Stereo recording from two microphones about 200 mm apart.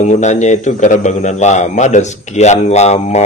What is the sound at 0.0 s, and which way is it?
A man's voice, 35° left (ahead or behind).